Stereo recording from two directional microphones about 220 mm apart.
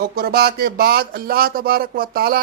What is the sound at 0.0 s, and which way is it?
Speech, 45° right (ahead or behind).